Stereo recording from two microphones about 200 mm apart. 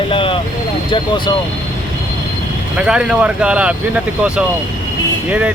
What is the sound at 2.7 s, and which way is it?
Speech, 5° right (ahead or behind).